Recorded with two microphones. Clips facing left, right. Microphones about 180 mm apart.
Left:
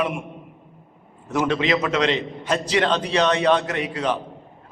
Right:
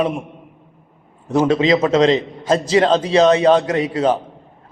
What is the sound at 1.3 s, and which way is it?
A man's voice, 30° right (ahead or behind).